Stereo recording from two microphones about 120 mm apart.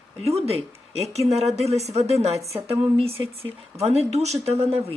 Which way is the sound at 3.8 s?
65° right (ahead or behind).